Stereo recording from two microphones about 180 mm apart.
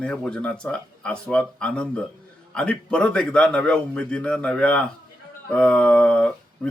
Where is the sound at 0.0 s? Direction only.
5° left (ahead or behind).